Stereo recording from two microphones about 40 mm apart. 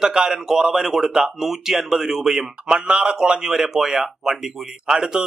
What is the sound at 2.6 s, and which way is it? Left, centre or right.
A man's voice, centre.